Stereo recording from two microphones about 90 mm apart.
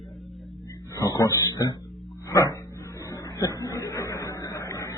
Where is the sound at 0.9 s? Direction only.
40° left (ahead or behind).